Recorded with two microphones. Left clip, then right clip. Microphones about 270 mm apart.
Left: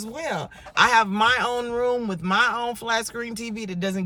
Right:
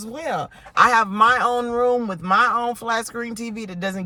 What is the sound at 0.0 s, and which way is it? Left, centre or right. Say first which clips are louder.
Speech: right 3 dB; centre.